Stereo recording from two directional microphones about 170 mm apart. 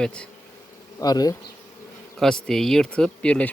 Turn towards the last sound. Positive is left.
turn(degrees=5)  # may be behind; listen again after turning